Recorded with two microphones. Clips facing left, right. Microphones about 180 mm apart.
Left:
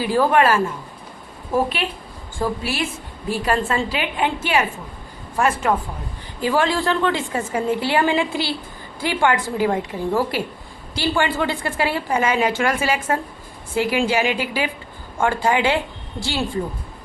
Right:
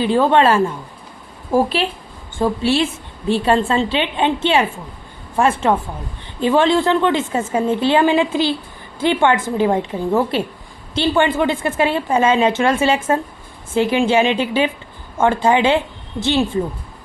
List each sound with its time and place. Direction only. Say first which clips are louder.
0.0 s a woman's voice: right 3 dB; 25° right (ahead or behind)